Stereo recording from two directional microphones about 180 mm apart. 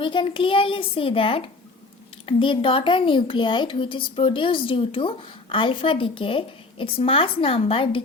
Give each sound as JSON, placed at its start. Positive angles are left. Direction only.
{"t": 0.0, "sound": "a woman's voice", "side_deg": 25}